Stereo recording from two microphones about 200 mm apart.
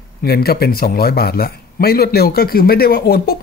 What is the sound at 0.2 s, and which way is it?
Speech, 50° left (ahead or behind).